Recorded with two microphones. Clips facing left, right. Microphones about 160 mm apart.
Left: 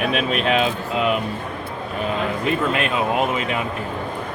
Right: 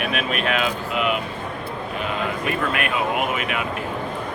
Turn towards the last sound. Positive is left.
turn(degrees=25)  # may be behind; listen again after turning